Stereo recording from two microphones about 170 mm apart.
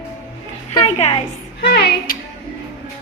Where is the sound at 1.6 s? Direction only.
65° left (ahead or behind).